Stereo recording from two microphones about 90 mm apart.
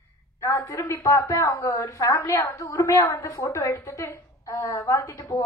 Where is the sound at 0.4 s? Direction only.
35° left (ahead or behind).